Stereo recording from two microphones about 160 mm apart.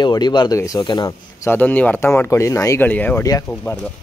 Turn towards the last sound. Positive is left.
turn(degrees=10)  # may be behind; listen again after turning